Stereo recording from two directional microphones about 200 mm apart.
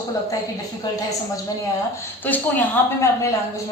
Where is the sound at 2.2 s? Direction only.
10° left (ahead or behind).